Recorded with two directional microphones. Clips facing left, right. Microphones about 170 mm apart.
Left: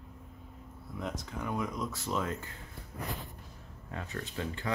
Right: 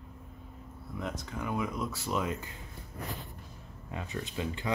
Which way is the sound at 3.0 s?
Centre (ahead or behind).